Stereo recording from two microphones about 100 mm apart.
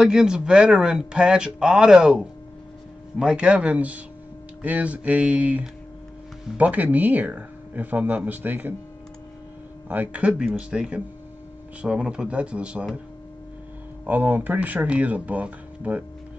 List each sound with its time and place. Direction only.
0.0 s speech: 5° right (ahead or behind)
9.8 s speech: 15° right (ahead or behind)
14.0 s speech: 20° right (ahead or behind)